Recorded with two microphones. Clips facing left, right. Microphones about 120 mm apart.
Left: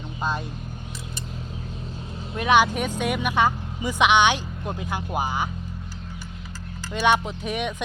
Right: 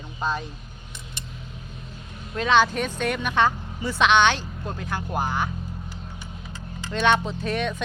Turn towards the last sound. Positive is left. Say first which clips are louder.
# right 1 dB
turn(degrees=15)  # may be behind; listen again after turning